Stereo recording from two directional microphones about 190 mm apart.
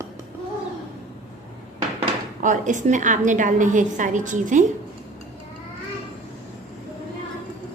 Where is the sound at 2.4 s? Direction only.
40° right (ahead or behind).